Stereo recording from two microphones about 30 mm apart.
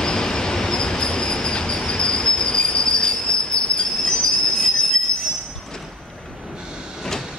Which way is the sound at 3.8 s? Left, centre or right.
Centre.